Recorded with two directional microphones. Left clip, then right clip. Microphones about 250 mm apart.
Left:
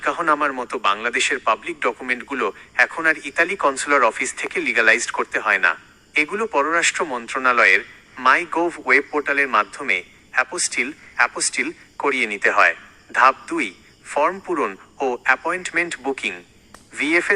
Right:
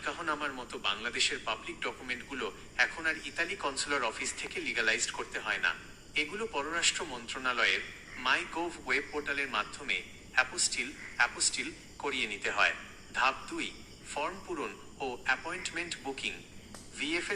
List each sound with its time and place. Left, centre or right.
0.0 s a man's voice: left